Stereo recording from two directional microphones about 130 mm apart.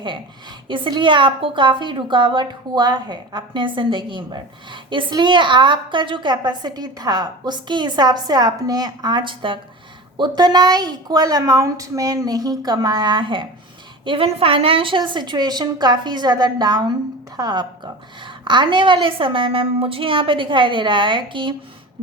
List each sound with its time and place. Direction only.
0.7 s a woman's voice: 40° right (ahead or behind)